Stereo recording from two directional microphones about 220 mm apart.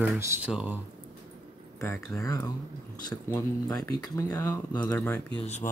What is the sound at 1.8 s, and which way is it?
Speech, 10° left (ahead or behind).